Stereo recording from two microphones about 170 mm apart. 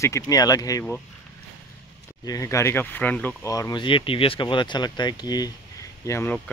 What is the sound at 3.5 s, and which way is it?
Speech, 25° left (ahead or behind).